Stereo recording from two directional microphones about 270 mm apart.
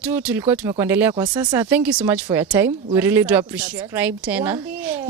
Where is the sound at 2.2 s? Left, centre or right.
Centre.